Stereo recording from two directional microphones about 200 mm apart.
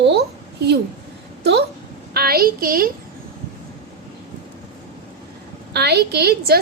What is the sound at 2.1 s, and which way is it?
Speech, 50° right (ahead or behind).